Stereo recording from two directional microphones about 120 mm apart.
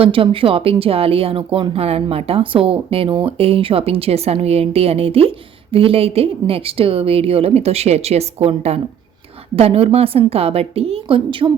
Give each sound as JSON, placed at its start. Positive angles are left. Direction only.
{"t": 0.0, "sound": "a woman's voice", "side_deg": -50}